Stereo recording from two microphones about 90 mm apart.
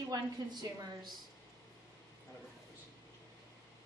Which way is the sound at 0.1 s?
50° right (ahead or behind).